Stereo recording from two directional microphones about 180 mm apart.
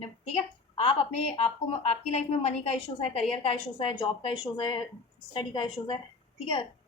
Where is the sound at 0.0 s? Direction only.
35° left (ahead or behind).